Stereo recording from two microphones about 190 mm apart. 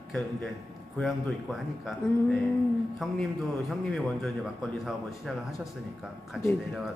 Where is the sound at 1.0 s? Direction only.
Centre (ahead or behind).